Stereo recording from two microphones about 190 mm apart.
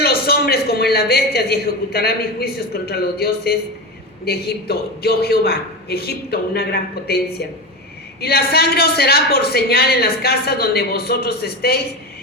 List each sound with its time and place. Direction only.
0.0 s a man's voice: 55° left (ahead or behind)